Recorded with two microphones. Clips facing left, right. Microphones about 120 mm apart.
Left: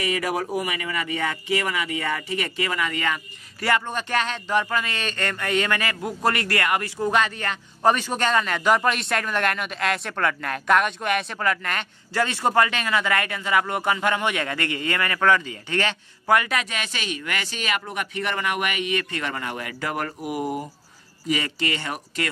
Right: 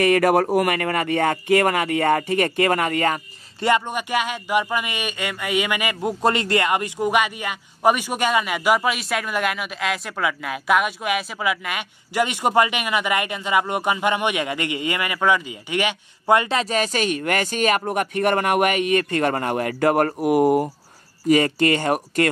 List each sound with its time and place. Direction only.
0.0 s speech: 55° right (ahead or behind)
3.6 s speech: 20° right (ahead or behind)
16.3 s speech: 30° right (ahead or behind); by 22.3 s 50° right (ahead or behind)